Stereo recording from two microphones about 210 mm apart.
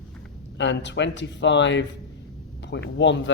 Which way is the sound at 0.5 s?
60° left (ahead or behind).